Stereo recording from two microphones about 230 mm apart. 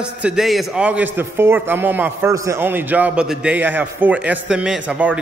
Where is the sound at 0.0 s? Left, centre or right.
Centre.